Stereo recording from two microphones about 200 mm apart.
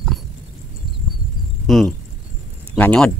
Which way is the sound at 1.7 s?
Centre (ahead or behind).